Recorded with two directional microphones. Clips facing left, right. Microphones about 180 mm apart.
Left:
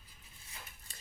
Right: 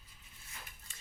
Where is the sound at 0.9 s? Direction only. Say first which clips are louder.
Left 2 dB; 35° left (ahead or behind).